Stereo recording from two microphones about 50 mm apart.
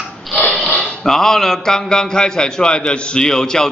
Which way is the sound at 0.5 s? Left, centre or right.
Centre.